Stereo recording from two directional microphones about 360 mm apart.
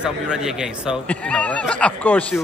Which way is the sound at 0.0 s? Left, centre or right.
Centre.